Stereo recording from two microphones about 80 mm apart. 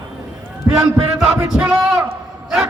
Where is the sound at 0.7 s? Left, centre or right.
Centre.